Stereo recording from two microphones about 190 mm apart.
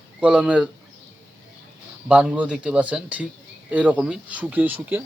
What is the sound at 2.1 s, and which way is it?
Speech, 5° right (ahead or behind).